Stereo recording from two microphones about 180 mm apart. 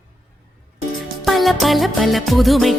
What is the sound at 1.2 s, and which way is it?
Music, centre (ahead or behind).